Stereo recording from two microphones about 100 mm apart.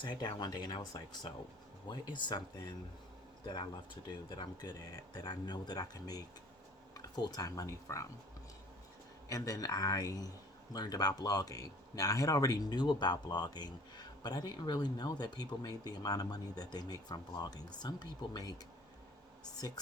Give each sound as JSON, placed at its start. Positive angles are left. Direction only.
{"t": 0.0, "sound": "speech", "side_deg": 55}
{"t": 5.1, "sound": "speech", "side_deg": 45}
{"t": 9.3, "sound": "speech", "side_deg": 35}